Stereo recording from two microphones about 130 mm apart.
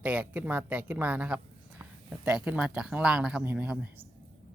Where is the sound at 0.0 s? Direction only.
10° right (ahead or behind).